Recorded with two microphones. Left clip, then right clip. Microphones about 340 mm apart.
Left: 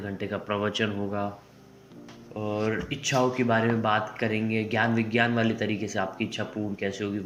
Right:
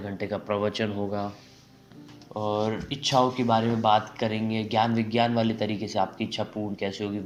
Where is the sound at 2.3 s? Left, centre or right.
Right.